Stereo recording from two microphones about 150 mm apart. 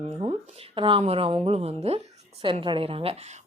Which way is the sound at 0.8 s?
35° right (ahead or behind).